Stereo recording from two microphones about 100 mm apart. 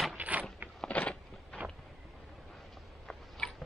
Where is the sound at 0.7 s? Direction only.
10° left (ahead or behind).